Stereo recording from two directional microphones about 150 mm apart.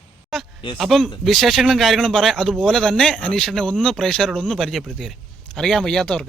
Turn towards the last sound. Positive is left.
turn(degrees=5)  # may be behind; listen again after turning